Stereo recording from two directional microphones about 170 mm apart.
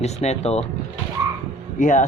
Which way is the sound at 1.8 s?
50° left (ahead or behind).